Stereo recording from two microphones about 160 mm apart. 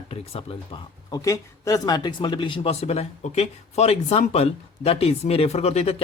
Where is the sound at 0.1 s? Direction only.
35° left (ahead or behind).